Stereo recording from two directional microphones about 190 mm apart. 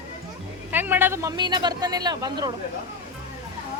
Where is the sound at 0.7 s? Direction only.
10° right (ahead or behind).